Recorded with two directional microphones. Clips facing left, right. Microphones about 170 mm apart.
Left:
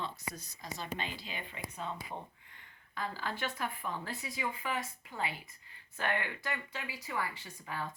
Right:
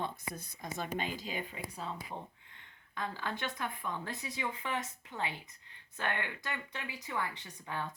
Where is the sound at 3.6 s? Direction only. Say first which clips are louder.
Even; 5° left (ahead or behind).